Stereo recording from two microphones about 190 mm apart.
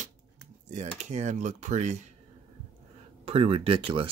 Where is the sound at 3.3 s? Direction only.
30° right (ahead or behind).